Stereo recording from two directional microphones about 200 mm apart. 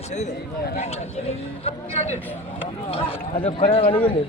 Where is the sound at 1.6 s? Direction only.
30° left (ahead or behind).